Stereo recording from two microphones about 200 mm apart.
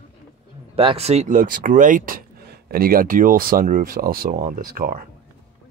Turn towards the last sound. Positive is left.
turn(degrees=-45)  # may be behind; listen again after turning